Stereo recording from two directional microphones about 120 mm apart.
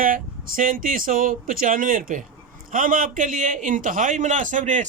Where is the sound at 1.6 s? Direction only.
90° right.